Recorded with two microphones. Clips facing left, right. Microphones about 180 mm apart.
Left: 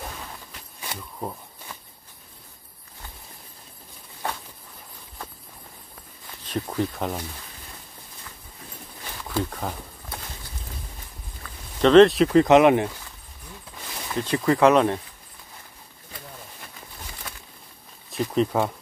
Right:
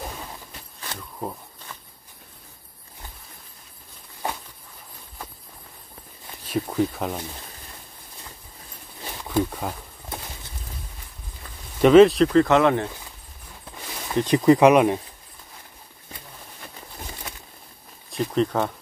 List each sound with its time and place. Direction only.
6.4 s speech: 5° right (ahead or behind)
9.3 s speech: 10° right (ahead or behind)
11.8 s speech: 5° right (ahead or behind)
12.3 s speech: 20° left (ahead or behind)
14.1 s speech: 20° right (ahead or behind)
18.1 s speech: 5° left (ahead or behind)